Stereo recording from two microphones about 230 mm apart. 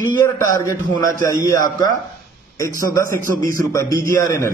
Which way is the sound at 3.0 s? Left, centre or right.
Right.